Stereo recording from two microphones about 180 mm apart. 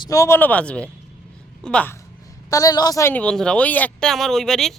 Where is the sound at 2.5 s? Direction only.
20° left (ahead or behind).